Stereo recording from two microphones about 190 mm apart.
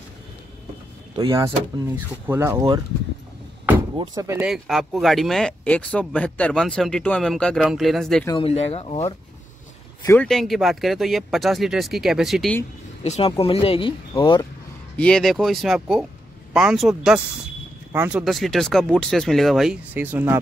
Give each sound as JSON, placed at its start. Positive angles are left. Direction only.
{"t": 1.1, "sound": "speech", "side_deg": -20}
{"t": 3.6, "sound": "door", "side_deg": -20}
{"t": 4.4, "sound": "speech", "side_deg": 0}
{"t": 8.3, "sound": "speech", "side_deg": 30}
{"t": 10.0, "sound": "speech", "side_deg": 5}
{"t": 13.0, "sound": "speech", "side_deg": 35}
{"t": 15.0, "sound": "speech", "side_deg": 5}